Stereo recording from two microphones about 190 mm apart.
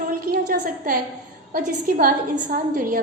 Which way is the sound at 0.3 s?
45° right (ahead or behind).